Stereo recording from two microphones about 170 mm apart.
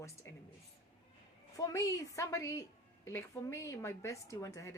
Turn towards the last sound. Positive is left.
turn(degrees=20)  # may be behind; listen again after turning